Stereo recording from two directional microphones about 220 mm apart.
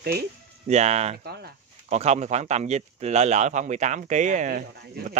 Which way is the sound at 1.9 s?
30° right (ahead or behind).